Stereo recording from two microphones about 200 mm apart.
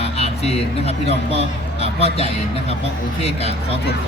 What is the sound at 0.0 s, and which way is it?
Speech, 30° left (ahead or behind).